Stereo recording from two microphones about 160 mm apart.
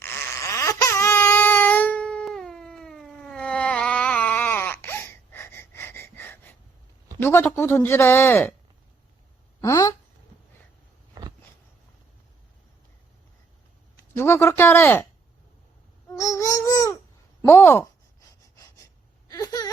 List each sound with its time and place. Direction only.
0.5 s baby cry: 20° left (ahead or behind)
7.2 s speech: 15° left (ahead or behind)
9.6 s speech: 20° left (ahead or behind)
13.9 s speech: 15° left (ahead or behind)
16.0 s babbling: 20° left (ahead or behind)
17.4 s speech: 15° left (ahead or behind)
19.3 s a sound: 20° left (ahead or behind)